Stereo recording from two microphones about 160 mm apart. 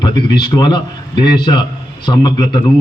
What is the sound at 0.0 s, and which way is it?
A man's voice, 30° left (ahead or behind).